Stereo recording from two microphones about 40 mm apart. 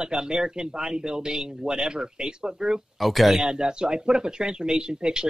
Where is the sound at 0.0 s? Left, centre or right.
Centre.